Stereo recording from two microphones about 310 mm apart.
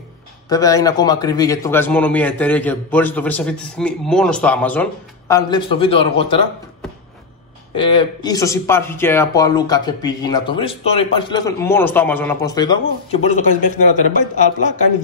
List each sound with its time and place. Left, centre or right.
0.5 s a man's voice: centre
7.7 s speech: centre